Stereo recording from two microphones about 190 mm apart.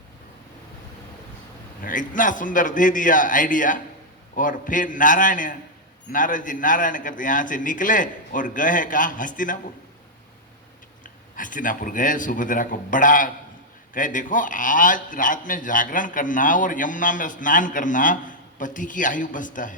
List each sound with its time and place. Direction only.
1.8 s a man's voice: 45° left (ahead or behind)
11.0 s a man's voice: 45° left (ahead or behind)